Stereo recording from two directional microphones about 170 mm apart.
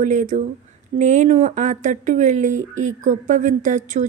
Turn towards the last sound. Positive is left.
turn(degrees=-45)  # may be behind; listen again after turning